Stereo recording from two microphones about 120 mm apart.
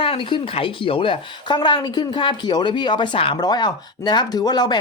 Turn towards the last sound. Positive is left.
turn(degrees=35)  # may be behind; listen again after turning